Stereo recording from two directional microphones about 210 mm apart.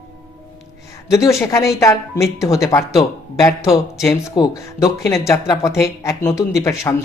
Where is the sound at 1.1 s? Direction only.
15° left (ahead or behind).